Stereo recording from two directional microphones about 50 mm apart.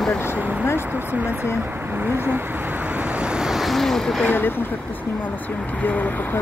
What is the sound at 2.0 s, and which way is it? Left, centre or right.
Speech, right.